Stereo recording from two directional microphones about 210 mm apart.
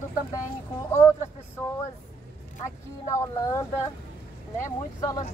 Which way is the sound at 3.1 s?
15° left (ahead or behind).